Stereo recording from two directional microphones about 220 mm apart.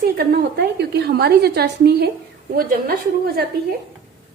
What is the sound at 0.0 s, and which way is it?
A woman's voice, 45° right (ahead or behind).